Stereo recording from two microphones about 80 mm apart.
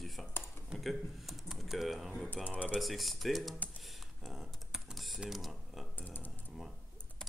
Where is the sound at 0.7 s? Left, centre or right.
Centre.